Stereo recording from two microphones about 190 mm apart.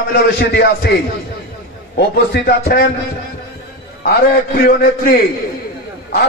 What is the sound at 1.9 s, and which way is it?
Speech, 60° left (ahead or behind).